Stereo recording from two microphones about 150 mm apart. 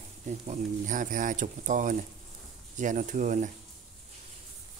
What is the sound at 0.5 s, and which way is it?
Speech, 60° right (ahead or behind).